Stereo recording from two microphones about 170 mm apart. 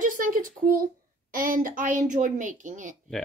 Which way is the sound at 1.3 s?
55° right (ahead or behind).